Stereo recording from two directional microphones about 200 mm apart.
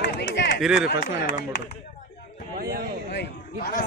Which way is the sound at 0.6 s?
5° right (ahead or behind).